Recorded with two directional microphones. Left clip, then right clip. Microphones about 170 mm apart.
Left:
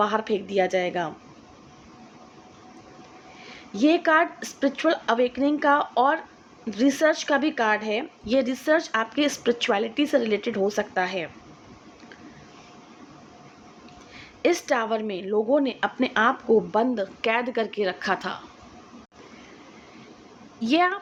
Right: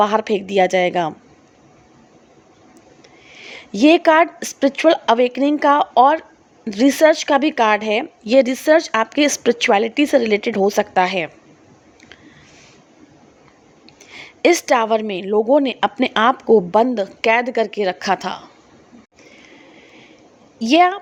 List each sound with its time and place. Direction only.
0.0 s speech: 45° right (ahead or behind)
3.3 s speech: 45° right (ahead or behind)
14.1 s speech: 45° right (ahead or behind)
20.6 s a woman's voice: 35° right (ahead or behind)